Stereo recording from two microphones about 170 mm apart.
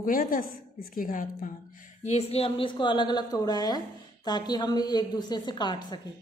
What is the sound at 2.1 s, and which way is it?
A woman's voice, 35° left (ahead or behind).